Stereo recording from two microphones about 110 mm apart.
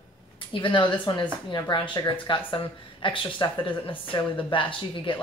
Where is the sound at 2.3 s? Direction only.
50° left (ahead or behind).